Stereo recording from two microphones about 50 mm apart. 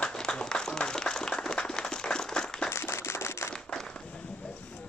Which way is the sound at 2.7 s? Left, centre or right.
Left.